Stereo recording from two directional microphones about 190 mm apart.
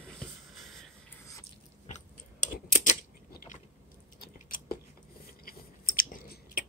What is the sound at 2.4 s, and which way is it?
Typing, 40° left (ahead or behind).